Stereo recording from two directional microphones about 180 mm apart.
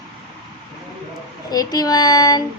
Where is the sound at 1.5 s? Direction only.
20° left (ahead or behind).